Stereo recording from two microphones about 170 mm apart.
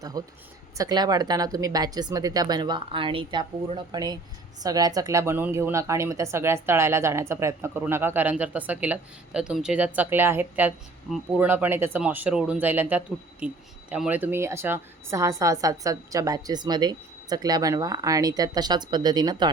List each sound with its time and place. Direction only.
0.0 s a woman's voice: 20° right (ahead or behind)